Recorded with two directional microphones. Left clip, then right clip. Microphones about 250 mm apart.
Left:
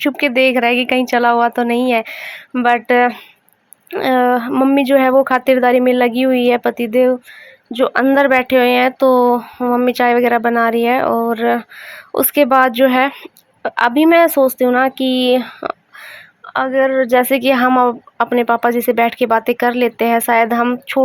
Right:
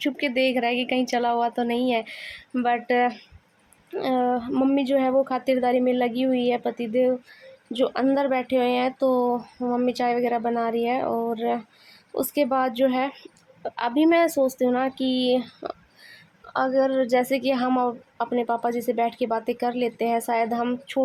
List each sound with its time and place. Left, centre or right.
0.0 s a woman's voice: centre
16.5 s speech: left
16.9 s speech: centre